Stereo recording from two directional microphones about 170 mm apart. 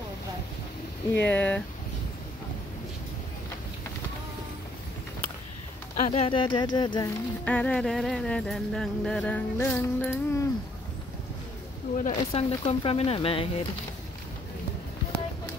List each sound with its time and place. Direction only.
1.2 s speech: 10° left (ahead or behind)
5.9 s speech: 40° left (ahead or behind)
7.4 s speech: 5° left (ahead or behind)
12.0 s speech: 35° left (ahead or behind)